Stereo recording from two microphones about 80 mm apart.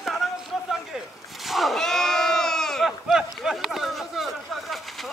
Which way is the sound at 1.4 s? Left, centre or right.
Centre.